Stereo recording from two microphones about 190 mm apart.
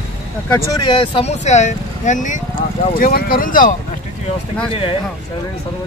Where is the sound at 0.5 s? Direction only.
20° left (ahead or behind); by 3.7 s 45° left (ahead or behind).